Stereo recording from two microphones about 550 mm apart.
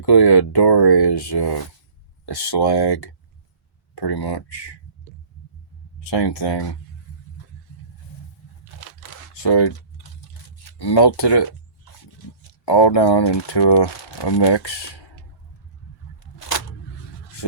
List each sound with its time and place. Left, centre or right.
0.0 s speech: left
6.1 s speech: left
9.0 s typing: left
10.7 s speech: left